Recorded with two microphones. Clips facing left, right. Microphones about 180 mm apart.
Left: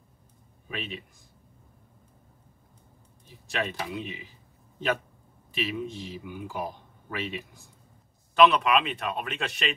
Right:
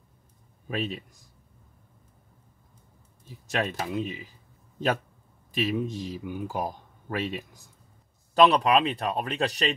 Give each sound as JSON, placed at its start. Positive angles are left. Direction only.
{"t": 0.7, "sound": "speech", "side_deg": -40}
{"t": 3.4, "sound": "speech", "side_deg": -45}
{"t": 5.5, "sound": "speech", "side_deg": -45}